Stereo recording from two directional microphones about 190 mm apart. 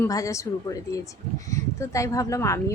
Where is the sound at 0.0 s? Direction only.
15° left (ahead or behind).